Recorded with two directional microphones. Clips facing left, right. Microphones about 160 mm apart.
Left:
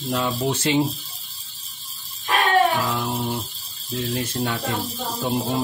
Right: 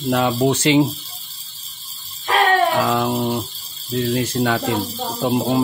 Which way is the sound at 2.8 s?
85° right.